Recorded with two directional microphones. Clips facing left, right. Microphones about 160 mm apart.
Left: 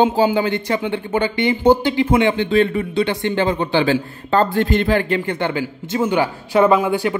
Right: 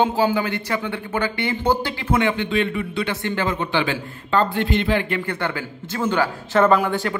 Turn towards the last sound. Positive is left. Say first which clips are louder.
# left 3 dB
turn(degrees=10)  # may be behind; listen again after turning